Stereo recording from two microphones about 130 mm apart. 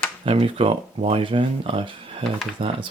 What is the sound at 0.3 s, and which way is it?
Speech, 45° right (ahead or behind).